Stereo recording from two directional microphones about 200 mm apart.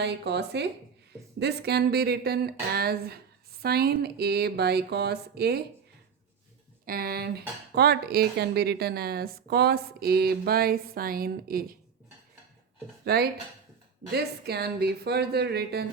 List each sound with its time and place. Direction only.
0.0 s speech: 55° right (ahead or behind)
6.8 s speech: 50° right (ahead or behind)
13.1 s speech: 50° right (ahead or behind)